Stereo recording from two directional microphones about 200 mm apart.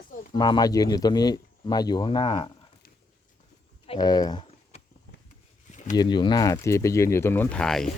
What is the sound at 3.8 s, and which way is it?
Speech, 20° left (ahead or behind).